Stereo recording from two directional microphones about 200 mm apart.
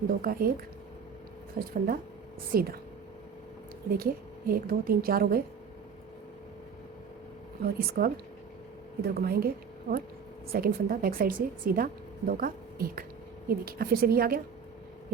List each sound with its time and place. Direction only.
0.1 s a woman's voice: 45° right (ahead or behind)
3.9 s a woman's voice: 45° right (ahead or behind)
7.6 s a woman's voice: 50° right (ahead or behind)
10.5 s a woman's voice: 50° right (ahead or behind)